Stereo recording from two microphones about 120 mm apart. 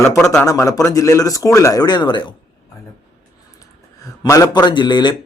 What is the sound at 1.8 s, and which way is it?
Speech, 40° left (ahead or behind).